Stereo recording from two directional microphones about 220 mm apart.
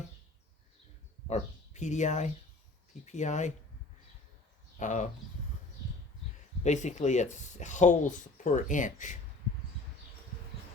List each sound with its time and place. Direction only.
1.3 s speech: 35° left (ahead or behind)
4.8 s speech: 35° left (ahead or behind)
6.6 s speech: 30° left (ahead or behind)